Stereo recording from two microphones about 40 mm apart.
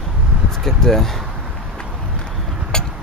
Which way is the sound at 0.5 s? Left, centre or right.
Centre.